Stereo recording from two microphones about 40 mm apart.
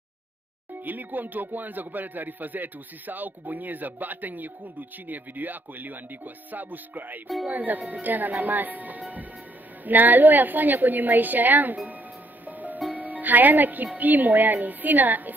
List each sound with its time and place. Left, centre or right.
0.8 s a man's voice: right
12.4 s music: right
13.9 s a man's voice: right